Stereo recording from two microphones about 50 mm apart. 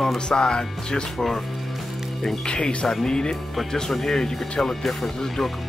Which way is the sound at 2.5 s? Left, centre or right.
Left.